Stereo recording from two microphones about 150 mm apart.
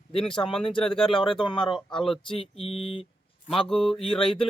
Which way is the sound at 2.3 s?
40° left (ahead or behind).